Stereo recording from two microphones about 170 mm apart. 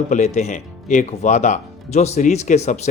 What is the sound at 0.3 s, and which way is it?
Speech, 45° left (ahead or behind).